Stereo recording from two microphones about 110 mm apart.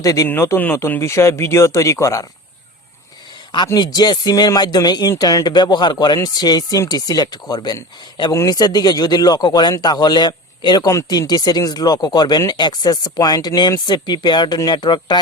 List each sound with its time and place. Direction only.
0.0 s speech: 30° left (ahead or behind)
0.3 s speech: 20° left (ahead or behind)
3.8 s a man's voice: 40° left (ahead or behind)
10.8 s speech: 30° left (ahead or behind)